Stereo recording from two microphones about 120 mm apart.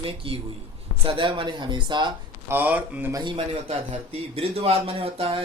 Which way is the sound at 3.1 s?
40° right (ahead or behind).